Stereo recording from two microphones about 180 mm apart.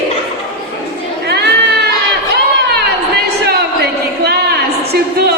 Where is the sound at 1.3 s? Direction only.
65° right (ahead or behind).